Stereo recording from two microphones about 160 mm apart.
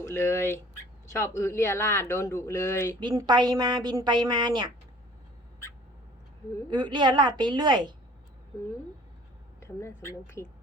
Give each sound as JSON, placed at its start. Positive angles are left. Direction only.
{"t": 0.0, "sound": "speech", "side_deg": 15}
{"t": 3.0, "sound": "a woman's voice", "side_deg": -25}
{"t": 6.7, "sound": "a woman's voice", "side_deg": -30}
{"t": 9.6, "sound": "speech", "side_deg": 15}